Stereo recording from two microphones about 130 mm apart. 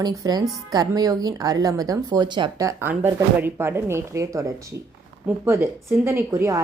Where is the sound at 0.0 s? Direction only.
30° right (ahead or behind).